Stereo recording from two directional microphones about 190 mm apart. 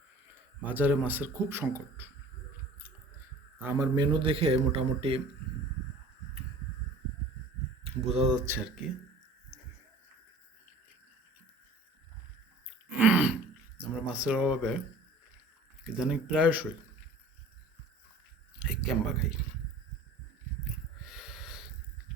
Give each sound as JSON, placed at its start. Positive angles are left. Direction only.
{"t": 0.6, "sound": "speech", "side_deg": -10}
{"t": 3.6, "sound": "a man's voice", "side_deg": -15}
{"t": 7.9, "sound": "speech", "side_deg": -35}
{"t": 8.4, "sound": "speech", "side_deg": -5}
{"t": 13.0, "sound": "throat clearing", "side_deg": -10}
{"t": 14.1, "sound": "speech", "side_deg": -5}
{"t": 15.8, "sound": "speech", "side_deg": -5}
{"t": 18.6, "sound": "speech", "side_deg": -5}
{"t": 21.0, "sound": "snort", "side_deg": -5}